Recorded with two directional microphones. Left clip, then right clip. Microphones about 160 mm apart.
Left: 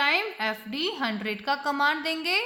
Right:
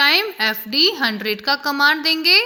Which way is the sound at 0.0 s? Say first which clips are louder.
Right 9 dB; 20° right (ahead or behind).